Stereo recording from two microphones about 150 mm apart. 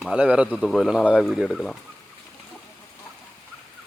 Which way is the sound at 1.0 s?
10° left (ahead or behind).